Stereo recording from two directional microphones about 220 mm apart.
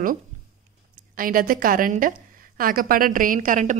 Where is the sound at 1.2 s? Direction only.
40° right (ahead or behind).